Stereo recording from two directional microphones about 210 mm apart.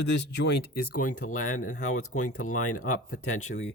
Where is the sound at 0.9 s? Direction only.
90° left.